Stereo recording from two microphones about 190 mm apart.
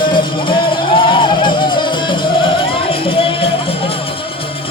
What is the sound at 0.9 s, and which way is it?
Music, 25° left (ahead or behind).